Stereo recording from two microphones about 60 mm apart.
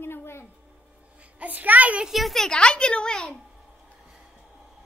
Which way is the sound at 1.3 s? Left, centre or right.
Right.